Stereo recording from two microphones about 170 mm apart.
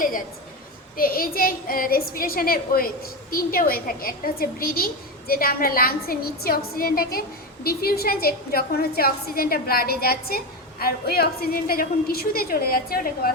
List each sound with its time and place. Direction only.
0.9 s a woman's voice: 60° left (ahead or behind)